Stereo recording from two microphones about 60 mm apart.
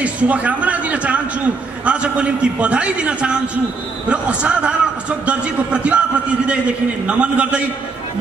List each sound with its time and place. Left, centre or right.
0.0 s a man's voice: right